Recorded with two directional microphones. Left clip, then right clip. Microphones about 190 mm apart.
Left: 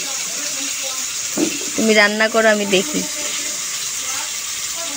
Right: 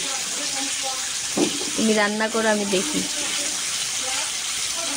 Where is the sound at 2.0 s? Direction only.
20° left (ahead or behind).